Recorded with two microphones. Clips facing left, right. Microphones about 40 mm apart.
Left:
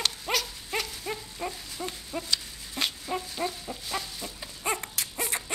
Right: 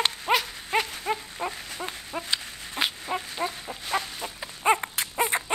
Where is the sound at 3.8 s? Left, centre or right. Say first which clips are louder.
Right 7 dB; right.